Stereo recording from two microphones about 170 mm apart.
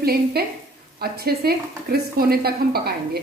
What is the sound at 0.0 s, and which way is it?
Speech, 65° right (ahead or behind).